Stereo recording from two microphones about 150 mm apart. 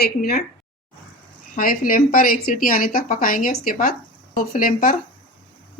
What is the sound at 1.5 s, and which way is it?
A woman's voice, 70° left (ahead or behind).